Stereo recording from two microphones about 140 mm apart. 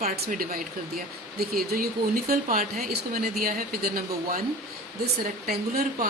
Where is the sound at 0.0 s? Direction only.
65° right (ahead or behind).